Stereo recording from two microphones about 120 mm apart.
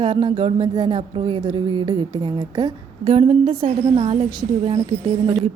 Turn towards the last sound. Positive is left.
turn(degrees=-50)  # may be behind; listen again after turning